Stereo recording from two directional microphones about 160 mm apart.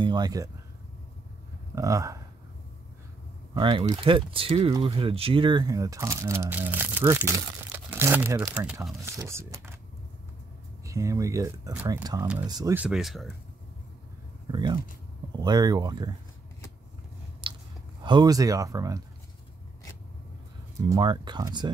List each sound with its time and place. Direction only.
0.0 s speech: 25° right (ahead or behind)
1.8 s speech: 20° right (ahead or behind)
3.5 s speech: 25° right (ahead or behind)
10.9 s speech: 20° right (ahead or behind)
12.0 s speech: 25° right (ahead or behind)
12.7 s speech: 5° right (ahead or behind)
14.5 s speech: 25° right (ahead or behind)
17.4 s biting: 30° right (ahead or behind)
18.0 s speech: 25° right (ahead or behind)
20.9 s speech: 30° right (ahead or behind)